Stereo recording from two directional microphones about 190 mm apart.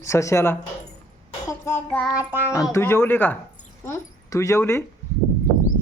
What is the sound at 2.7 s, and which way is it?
A man's voice, 10° left (ahead or behind).